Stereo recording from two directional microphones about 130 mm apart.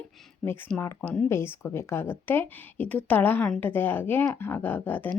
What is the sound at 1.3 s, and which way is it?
A woman's voice, 20° left (ahead or behind).